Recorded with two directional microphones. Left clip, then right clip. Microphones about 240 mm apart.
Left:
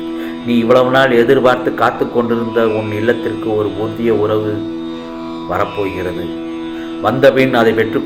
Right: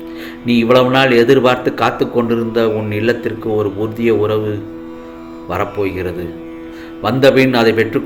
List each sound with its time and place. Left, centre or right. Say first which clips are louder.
0.4 s a man's voice: even; right
5.5 s a man's voice: left 1 dB; right